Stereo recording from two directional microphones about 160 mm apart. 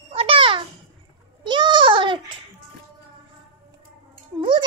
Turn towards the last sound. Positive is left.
turn(degrees=-30)  # may be behind; listen again after turning